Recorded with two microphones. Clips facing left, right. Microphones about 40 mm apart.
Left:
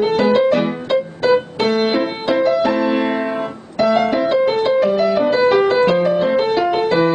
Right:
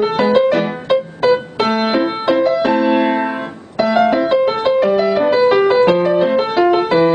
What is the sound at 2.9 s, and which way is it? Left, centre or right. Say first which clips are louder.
Piano: right 3 dB; right.